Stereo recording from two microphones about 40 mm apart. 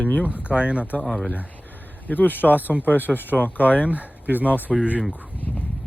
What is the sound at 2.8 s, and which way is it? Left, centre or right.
Speech, left.